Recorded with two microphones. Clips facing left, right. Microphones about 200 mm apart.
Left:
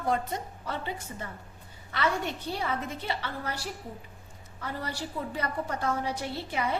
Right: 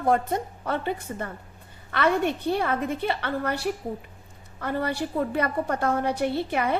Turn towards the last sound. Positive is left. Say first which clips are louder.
# right 6 dB
turn(degrees=-60)  # may be behind; listen again after turning